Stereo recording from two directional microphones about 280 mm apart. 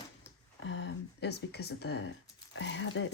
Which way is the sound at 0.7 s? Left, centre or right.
Left.